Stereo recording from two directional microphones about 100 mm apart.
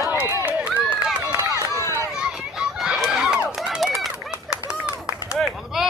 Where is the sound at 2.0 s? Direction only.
5° right (ahead or behind).